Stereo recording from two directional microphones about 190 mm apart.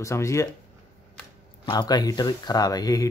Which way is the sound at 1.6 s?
20° left (ahead or behind).